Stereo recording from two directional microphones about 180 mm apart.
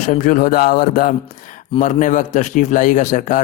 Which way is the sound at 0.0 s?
45° left (ahead or behind).